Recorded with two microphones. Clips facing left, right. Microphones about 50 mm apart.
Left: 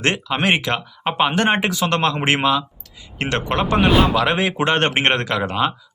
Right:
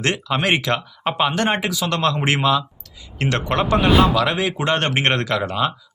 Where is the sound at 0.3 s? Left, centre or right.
Left.